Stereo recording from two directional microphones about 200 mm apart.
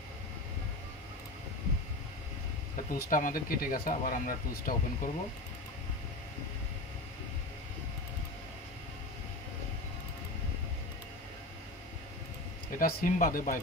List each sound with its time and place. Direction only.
2.9 s speech: 45° left (ahead or behind)
12.7 s speech: 45° left (ahead or behind)